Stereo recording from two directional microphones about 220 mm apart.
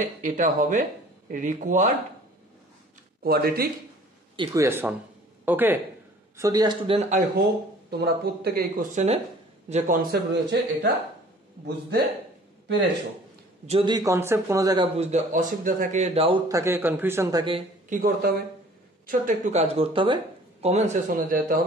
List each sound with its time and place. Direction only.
0.0 s speech: 35° right (ahead or behind)
3.3 s speech: 45° right (ahead or behind)
4.4 s a man's voice: 15° right (ahead or behind); by 7.4 s 35° right (ahead or behind)
7.9 s speech: 45° right (ahead or behind)
13.7 s a man's voice: 25° right (ahead or behind)
15.0 s a man's voice: 30° right (ahead or behind)
17.8 s a man's voice: 40° right (ahead or behind)